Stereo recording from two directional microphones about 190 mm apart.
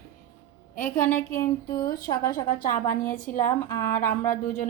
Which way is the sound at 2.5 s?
45° left (ahead or behind).